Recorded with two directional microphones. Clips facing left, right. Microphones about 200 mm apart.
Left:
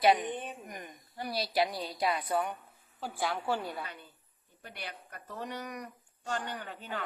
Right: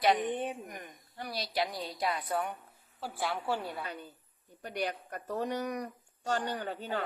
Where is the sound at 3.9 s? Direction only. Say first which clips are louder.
Right 6 dB; 40° right (ahead or behind).